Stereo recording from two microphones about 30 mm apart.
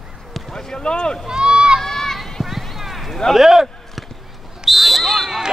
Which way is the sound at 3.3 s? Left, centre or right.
Centre.